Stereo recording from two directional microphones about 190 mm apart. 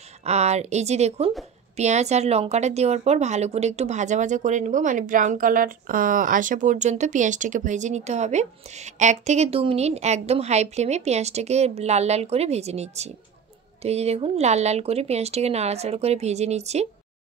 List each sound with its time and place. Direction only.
0.2 s a woman's voice: 35° right (ahead or behind)